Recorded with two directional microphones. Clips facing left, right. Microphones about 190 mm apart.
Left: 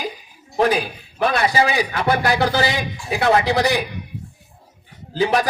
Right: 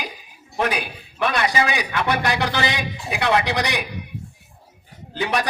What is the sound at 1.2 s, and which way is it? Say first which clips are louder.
A man's voice: left 3 dB; 35° left (ahead or behind).